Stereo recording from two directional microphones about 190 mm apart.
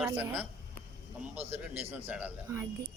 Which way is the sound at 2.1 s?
10° right (ahead or behind).